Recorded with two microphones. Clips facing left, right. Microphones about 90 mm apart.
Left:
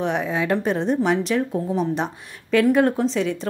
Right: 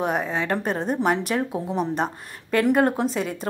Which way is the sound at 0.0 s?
Centre (ahead or behind).